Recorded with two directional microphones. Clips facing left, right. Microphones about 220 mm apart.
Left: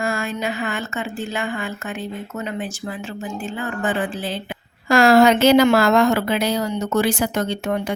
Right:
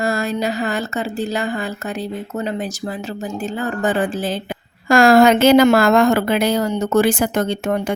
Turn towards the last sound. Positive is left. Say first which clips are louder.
# right 3 dB
turn(degrees=-50)  # may be behind; listen again after turning